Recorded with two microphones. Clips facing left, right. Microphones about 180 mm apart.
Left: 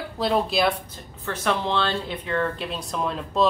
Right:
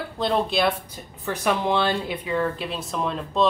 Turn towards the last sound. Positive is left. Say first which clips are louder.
# even
turn(degrees=0)  # may be behind; listen again after turning